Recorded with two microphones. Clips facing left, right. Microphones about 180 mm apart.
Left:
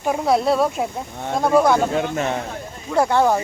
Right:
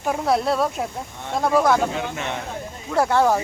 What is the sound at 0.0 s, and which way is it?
Speech, centre (ahead or behind).